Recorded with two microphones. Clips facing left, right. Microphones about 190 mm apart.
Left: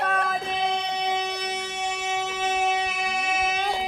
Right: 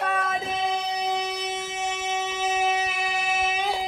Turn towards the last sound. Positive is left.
turn(degrees=0)  # may be behind; listen again after turning